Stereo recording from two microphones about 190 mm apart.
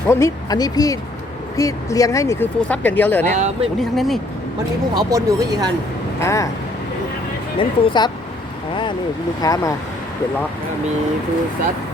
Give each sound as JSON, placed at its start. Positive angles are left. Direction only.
{"t": 0.1, "sound": "speech", "side_deg": 15}
{"t": 3.3, "sound": "speech", "side_deg": -35}
{"t": 3.8, "sound": "speech", "side_deg": 0}
{"t": 4.9, "sound": "speech", "side_deg": -20}
{"t": 6.1, "sound": "speech", "side_deg": 15}
{"t": 7.6, "sound": "speech", "side_deg": 25}
{"t": 9.4, "sound": "speech", "side_deg": 20}